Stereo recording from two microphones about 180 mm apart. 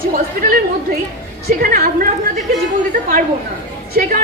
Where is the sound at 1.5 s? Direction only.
55° right (ahead or behind).